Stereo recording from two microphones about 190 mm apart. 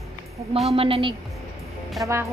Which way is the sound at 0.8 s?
30° right (ahead or behind).